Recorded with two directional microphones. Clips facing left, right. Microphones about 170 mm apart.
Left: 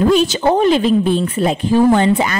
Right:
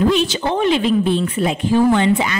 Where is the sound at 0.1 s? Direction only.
40° left (ahead or behind).